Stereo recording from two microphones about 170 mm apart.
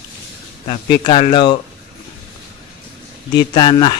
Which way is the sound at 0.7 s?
30° left (ahead or behind).